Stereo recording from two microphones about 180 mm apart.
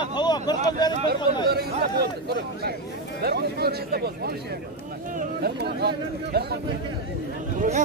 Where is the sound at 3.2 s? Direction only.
60° right (ahead or behind).